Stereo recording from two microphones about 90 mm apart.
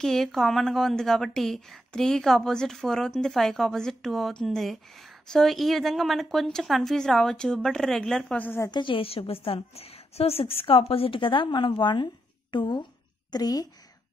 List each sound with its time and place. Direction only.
0.0 s a woman's voice: 5° left (ahead or behind)
8.6 s a woman's voice: 60° left (ahead or behind)
13.3 s a woman's voice: 45° left (ahead or behind)